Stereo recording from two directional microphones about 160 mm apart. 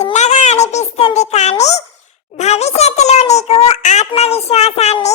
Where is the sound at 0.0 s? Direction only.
45° left (ahead or behind).